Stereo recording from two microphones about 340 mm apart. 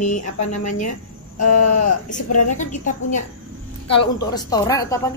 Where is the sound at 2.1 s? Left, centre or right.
Left.